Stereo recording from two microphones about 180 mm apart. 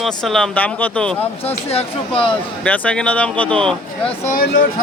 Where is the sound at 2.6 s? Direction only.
10° left (ahead or behind).